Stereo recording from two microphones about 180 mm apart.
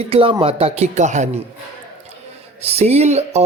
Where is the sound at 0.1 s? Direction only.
30° right (ahead or behind).